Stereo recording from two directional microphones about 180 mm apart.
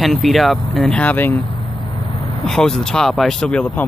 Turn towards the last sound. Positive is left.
turn(degrees=5)  # may be behind; listen again after turning